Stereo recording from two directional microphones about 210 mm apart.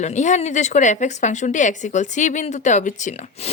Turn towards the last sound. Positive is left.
turn(degrees=30)  # may be behind; listen again after turning